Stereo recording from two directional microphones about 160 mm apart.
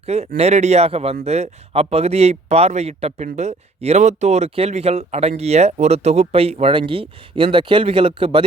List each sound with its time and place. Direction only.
0.0 s speech: 40° right (ahead or behind)